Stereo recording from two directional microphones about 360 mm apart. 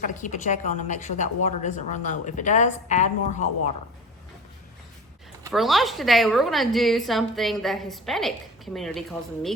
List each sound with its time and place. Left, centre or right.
0.0 s a woman's voice: left
5.5 s a woman's voice: centre